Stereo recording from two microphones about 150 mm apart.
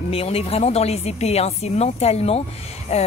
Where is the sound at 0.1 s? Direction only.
40° left (ahead or behind).